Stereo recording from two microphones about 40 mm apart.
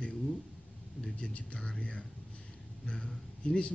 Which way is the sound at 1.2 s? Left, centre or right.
Left.